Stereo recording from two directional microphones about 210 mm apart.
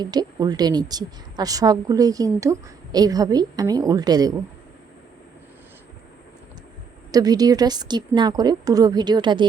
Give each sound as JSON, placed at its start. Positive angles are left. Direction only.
{"t": 0.0, "sound": "a woman's voice", "side_deg": -20}
{"t": 7.1, "sound": "a woman's voice", "side_deg": -20}